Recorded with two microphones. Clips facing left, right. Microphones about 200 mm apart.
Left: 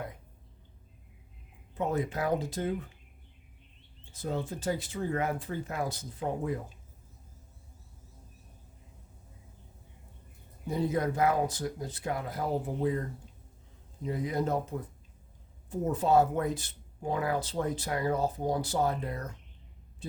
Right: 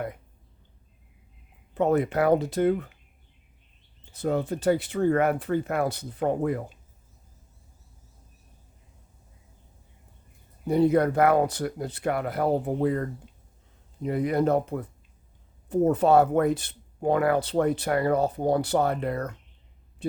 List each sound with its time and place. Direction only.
1.7 s speech: 65° right (ahead or behind)
4.1 s speech: 65° right (ahead or behind)
10.7 s speech: 65° right (ahead or behind)